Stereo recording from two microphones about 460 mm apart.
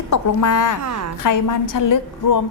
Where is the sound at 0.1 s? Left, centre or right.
Left.